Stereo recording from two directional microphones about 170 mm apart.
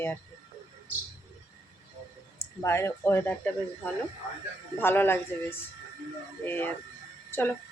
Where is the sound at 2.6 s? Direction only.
15° left (ahead or behind).